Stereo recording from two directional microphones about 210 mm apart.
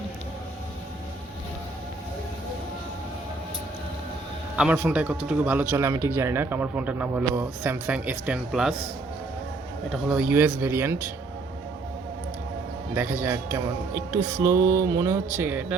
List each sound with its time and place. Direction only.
4.5 s speech: 5° right (ahead or behind)
9.9 s speech: 5° right (ahead or behind)
12.9 s speech: 10° right (ahead or behind)